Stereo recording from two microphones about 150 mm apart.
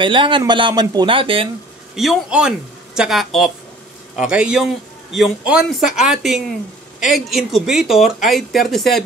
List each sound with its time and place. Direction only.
0.0 s speech: 35° right (ahead or behind)
2.0 s speech: 5° right (ahead or behind)